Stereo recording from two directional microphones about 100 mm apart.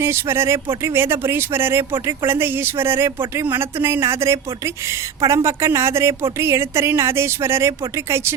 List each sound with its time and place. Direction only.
0.0 s speech: 25° right (ahead or behind)